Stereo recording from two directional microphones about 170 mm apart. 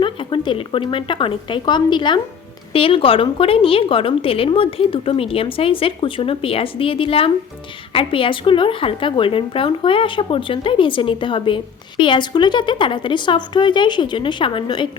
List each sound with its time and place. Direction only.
0.0 s a woman's voice: 30° left (ahead or behind)